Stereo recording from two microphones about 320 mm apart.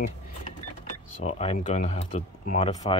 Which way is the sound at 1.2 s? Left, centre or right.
Centre.